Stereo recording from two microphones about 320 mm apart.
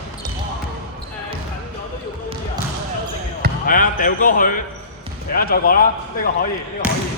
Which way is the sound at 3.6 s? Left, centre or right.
Left.